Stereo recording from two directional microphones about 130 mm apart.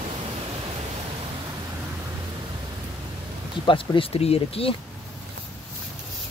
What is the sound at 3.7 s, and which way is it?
Speech, 45° left (ahead or behind).